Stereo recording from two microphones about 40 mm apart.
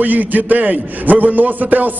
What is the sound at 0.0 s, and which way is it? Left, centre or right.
A man's voice, right.